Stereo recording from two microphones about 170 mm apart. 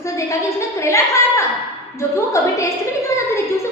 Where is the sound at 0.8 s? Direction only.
15° left (ahead or behind).